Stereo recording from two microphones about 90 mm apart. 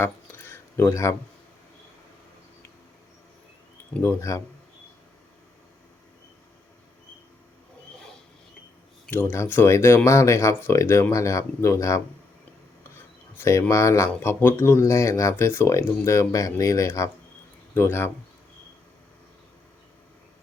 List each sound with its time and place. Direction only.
0.0 s a sound: 25° left (ahead or behind)
4.0 s speech: 30° left (ahead or behind)
9.0 s speech: 20° left (ahead or behind)
9.3 s speech: 30° left (ahead or behind)
13.3 s speech: 30° left (ahead or behind)
17.7 s speech: 25° left (ahead or behind)